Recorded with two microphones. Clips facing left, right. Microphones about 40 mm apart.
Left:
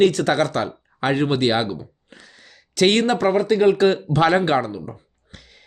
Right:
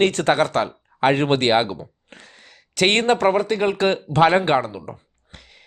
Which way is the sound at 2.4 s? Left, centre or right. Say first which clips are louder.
Left 2 dB; right.